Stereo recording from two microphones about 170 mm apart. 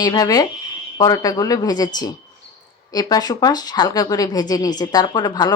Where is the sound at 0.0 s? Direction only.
20° left (ahead or behind).